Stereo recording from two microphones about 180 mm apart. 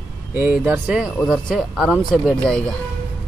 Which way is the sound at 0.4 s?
10° right (ahead or behind).